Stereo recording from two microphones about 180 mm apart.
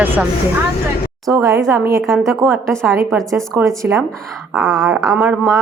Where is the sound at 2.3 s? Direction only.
15° right (ahead or behind).